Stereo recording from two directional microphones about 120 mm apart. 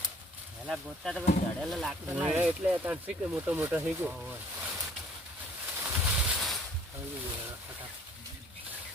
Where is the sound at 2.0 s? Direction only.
15° right (ahead or behind).